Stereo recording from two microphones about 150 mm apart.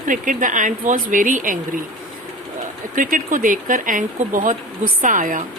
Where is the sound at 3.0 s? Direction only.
60° right (ahead or behind).